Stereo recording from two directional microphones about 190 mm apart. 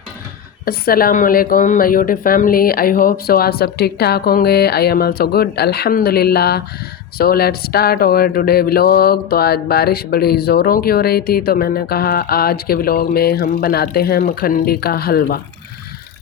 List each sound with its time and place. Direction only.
0.6 s a woman's voice: 50° left (ahead or behind)